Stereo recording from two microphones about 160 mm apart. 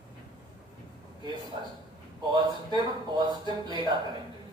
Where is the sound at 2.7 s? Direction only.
25° right (ahead or behind).